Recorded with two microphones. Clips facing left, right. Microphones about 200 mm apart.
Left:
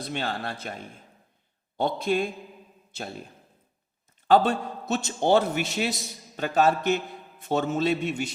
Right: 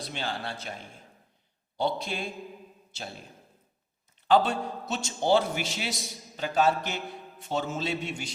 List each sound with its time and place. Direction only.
0.0 s a man's voice: 50° left (ahead or behind)
1.8 s a man's voice: 50° left (ahead or behind)
4.3 s a man's voice: 50° left (ahead or behind)